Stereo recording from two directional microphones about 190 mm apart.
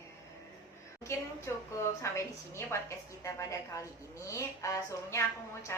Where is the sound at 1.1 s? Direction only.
15° left (ahead or behind).